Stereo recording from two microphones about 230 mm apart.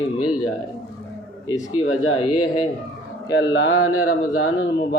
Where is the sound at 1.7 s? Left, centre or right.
Left.